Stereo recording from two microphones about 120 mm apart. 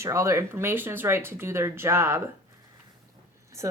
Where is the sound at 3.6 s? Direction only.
25° right (ahead or behind).